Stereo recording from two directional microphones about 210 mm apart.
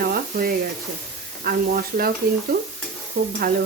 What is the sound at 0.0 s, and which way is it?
Speech, 45° right (ahead or behind).